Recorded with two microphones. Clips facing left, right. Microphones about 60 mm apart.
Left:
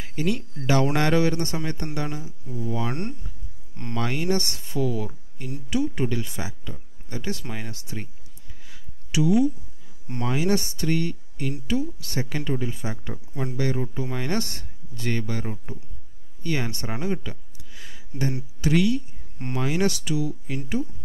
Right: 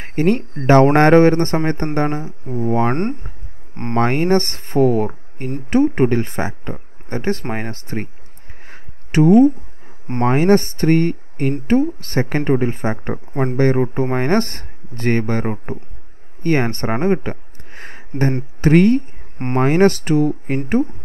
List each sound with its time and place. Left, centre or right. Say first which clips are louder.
0.0 s speech: right 10 dB; right